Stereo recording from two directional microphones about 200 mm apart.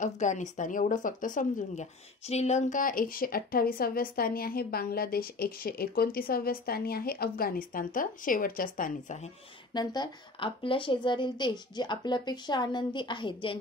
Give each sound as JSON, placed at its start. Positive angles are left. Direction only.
{"t": 0.0, "sound": "speech", "side_deg": 35}
{"t": 9.8, "sound": "a woman's voice", "side_deg": 25}